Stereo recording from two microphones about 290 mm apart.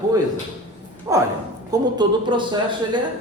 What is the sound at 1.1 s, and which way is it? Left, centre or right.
Speech, centre.